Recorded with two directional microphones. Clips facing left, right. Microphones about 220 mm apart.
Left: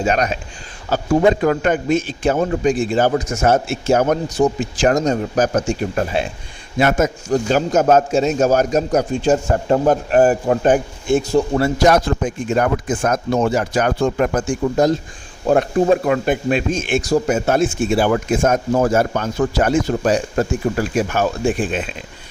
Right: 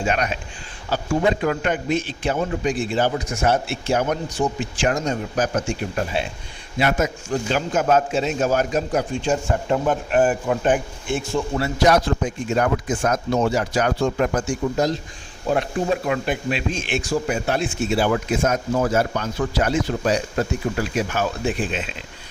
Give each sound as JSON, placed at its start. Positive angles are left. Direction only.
{"t": 0.0, "sound": "a man's voice", "side_deg": 40}